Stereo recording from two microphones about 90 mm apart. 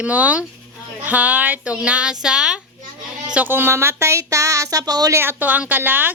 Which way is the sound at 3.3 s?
20° right (ahead or behind).